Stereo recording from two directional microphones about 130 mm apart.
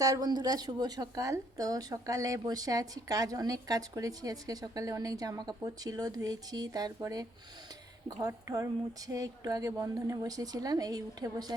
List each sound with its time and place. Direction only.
0.0 s a woman's voice: 30° right (ahead or behind)
8.3 s a woman's voice: 25° right (ahead or behind)